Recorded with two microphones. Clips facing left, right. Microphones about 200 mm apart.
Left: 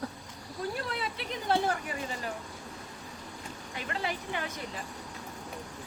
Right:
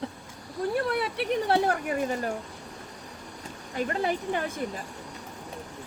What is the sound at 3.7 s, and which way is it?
Speech, 45° right (ahead or behind).